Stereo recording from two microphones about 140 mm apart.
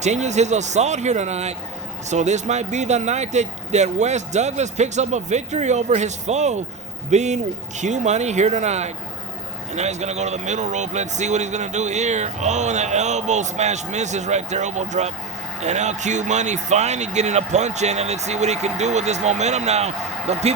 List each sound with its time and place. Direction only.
0.0 s speech: 55° right (ahead or behind)